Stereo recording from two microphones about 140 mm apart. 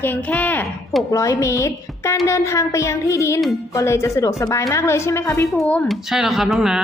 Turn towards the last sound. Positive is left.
turn(degrees=-5)  # may be behind; listen again after turning